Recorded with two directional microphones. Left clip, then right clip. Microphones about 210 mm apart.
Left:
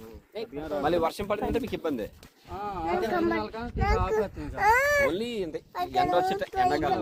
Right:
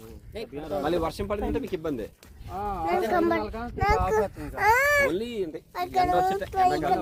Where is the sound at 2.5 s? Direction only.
15° right (ahead or behind).